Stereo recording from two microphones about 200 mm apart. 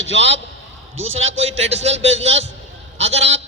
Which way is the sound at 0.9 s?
80° right.